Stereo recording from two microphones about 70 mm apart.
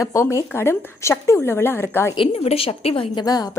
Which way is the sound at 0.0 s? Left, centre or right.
Left.